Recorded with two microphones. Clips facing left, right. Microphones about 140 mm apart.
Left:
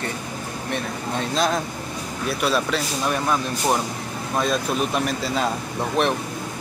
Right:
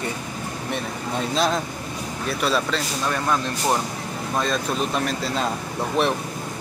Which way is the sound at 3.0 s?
15° left (ahead or behind).